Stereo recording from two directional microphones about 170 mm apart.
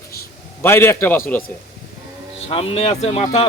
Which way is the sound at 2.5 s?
35° left (ahead or behind).